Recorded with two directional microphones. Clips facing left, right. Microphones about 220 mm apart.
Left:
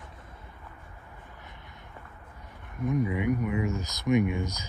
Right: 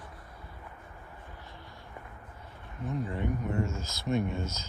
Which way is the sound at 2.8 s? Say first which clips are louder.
Left 6 dB; 90° left.